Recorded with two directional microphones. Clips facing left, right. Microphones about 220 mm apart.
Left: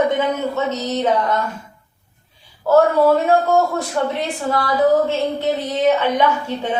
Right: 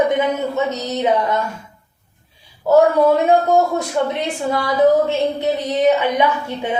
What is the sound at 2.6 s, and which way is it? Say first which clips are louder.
Speech: right 1 dB; 15° right (ahead or behind).